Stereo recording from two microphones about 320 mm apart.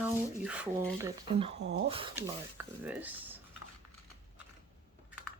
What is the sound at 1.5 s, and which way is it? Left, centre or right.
Speech, right.